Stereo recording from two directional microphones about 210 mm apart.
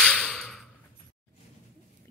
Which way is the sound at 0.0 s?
Centre (ahead or behind).